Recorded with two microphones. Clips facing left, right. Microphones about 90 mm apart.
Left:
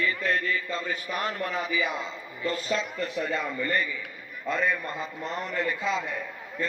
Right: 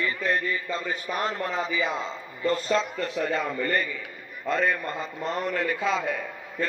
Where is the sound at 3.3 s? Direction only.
65° right (ahead or behind).